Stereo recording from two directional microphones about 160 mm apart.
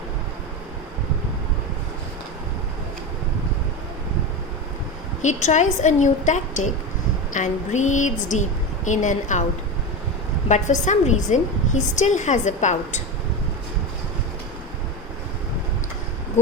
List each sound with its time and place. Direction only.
5.2 s a woman's voice: 50° left (ahead or behind)
10.5 s a woman's voice: 50° left (ahead or behind)